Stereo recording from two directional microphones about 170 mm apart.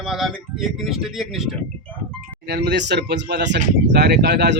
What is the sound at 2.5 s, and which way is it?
Speech, 75° right (ahead or behind).